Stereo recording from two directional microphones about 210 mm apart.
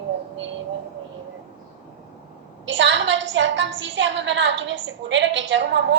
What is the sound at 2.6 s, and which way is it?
A woman's voice, 60° right (ahead or behind).